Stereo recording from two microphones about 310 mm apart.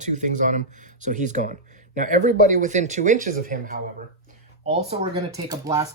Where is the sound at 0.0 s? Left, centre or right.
Right.